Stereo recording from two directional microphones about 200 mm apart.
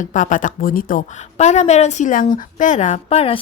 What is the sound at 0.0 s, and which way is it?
A woman's voice, 40° left (ahead or behind).